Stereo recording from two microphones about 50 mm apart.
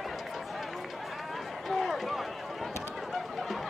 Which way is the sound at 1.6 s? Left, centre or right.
Centre.